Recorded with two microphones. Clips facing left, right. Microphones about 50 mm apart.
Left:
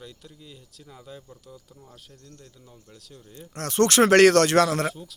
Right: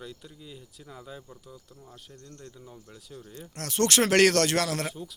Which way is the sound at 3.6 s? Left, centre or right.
Left.